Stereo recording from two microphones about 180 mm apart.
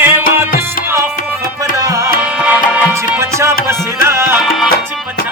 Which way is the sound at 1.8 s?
15° right (ahead or behind).